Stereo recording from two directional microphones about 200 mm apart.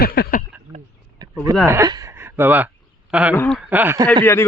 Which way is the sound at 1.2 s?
20° right (ahead or behind).